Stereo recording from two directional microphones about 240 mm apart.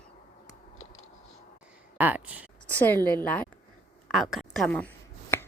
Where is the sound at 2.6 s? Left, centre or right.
Centre.